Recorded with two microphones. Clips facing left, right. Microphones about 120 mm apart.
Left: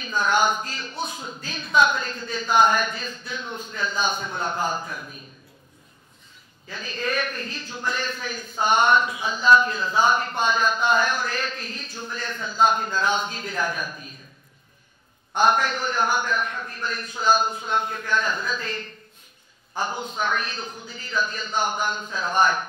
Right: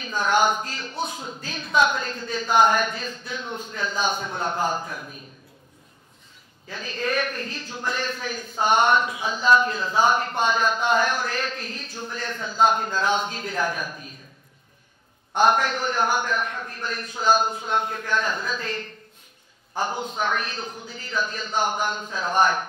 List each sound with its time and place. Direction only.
0.0 s a man's voice: 55° right (ahead or behind)
4.7 s a man's voice: 35° right (ahead or behind)
6.7 s a man's voice: 50° right (ahead or behind)
15.3 s a man's voice: 55° right (ahead or behind)